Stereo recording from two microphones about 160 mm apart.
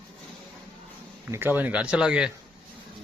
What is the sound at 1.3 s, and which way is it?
Speech, 10° right (ahead or behind).